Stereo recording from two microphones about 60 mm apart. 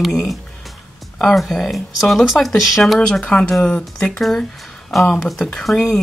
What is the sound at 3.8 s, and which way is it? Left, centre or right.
Speech, centre.